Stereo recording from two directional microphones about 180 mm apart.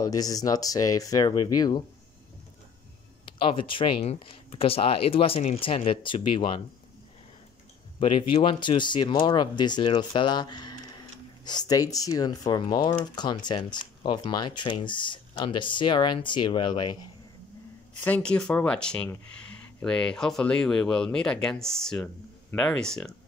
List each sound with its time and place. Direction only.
0.0 s speech: 20° left (ahead or behind)
3.3 s speech: 30° left (ahead or behind)
8.0 s speech: 30° left (ahead or behind)
18.0 s speech: 5° left (ahead or behind)